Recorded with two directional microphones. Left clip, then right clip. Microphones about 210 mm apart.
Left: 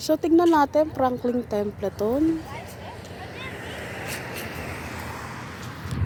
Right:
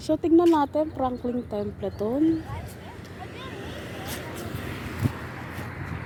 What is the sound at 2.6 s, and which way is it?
Vehicle, 55° right (ahead or behind).